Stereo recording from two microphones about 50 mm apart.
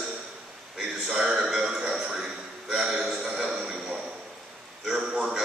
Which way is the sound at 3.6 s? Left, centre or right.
Centre.